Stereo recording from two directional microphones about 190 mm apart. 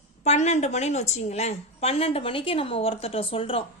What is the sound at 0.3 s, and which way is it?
A woman's voice, 35° left (ahead or behind).